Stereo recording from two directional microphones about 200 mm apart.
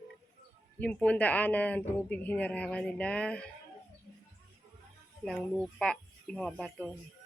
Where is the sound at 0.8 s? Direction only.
5° left (ahead or behind).